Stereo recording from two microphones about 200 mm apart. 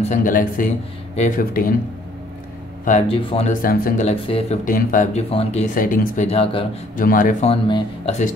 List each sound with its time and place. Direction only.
0.0 s a man's voice: 40° left (ahead or behind)
3.1 s speech: 30° left (ahead or behind)
3.6 s speech: 45° left (ahead or behind)
4.6 s speech: 40° left (ahead or behind)
5.8 s speech: 40° left (ahead or behind)
7.0 s a man's voice: 45° left (ahead or behind)
7.6 s speech: 25° left (ahead or behind)